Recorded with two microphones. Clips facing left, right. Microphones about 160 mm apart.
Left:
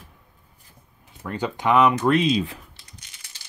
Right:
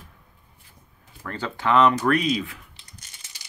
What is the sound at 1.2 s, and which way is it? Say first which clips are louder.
Speech: left 3 dB; 15° left (ahead or behind).